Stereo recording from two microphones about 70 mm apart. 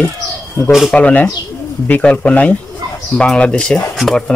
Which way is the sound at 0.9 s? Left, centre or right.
Left.